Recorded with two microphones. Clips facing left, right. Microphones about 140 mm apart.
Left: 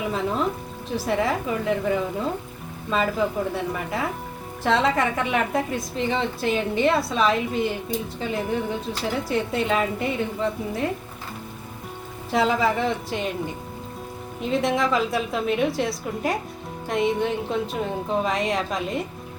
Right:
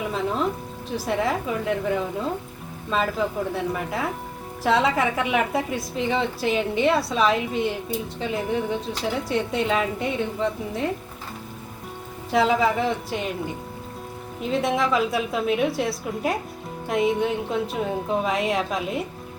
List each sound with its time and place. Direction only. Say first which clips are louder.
0.9 s a woman's voice: left 1 dB; centre (ahead or behind)
12.3 s a woman's voice: right 1 dB; centre (ahead or behind)
14.4 s a woman's voice: even; centre (ahead or behind)